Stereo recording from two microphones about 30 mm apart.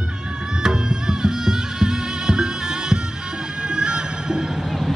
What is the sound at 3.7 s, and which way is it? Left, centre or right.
Music, right.